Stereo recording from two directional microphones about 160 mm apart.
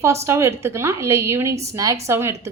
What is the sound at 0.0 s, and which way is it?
A woman's voice, 15° right (ahead or behind).